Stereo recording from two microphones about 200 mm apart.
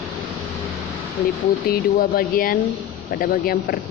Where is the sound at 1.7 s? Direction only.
45° left (ahead or behind).